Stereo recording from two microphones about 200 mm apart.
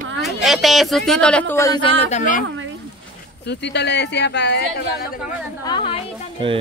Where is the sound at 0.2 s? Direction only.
Centre (ahead or behind).